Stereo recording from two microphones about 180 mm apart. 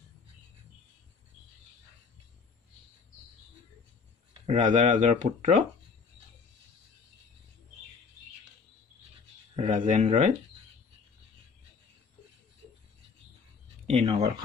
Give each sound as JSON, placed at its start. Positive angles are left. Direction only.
{"t": 4.5, "sound": "speech", "side_deg": -40}
{"t": 9.6, "sound": "speech", "side_deg": -40}
{"t": 13.8, "sound": "speech", "side_deg": -35}